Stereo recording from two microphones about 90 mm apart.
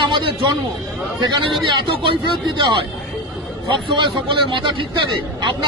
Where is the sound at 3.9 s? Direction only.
70° right (ahead or behind).